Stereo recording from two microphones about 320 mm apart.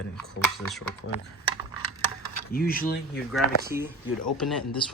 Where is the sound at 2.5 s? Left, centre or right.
Left.